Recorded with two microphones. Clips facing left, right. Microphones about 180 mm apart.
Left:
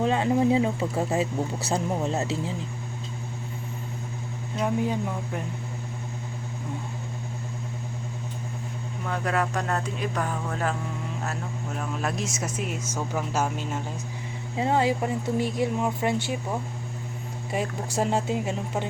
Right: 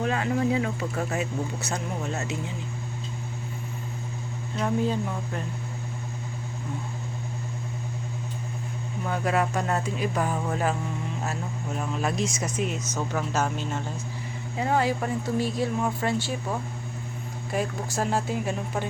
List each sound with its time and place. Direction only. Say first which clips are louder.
0.0 s speech: left 3 dB; 25° left (ahead or behind)
4.6 s speech: even; 15° left (ahead or behind)
9.0 s speech: right 1 dB; 5° right (ahead or behind)
11.8 s speech: right 2 dB; centre (ahead or behind)
14.5 s speech: left 1 dB; 25° left (ahead or behind)
17.5 s speech: even; 25° left (ahead or behind)